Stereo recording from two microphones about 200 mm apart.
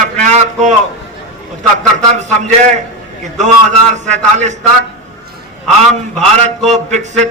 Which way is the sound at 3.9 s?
35° right (ahead or behind).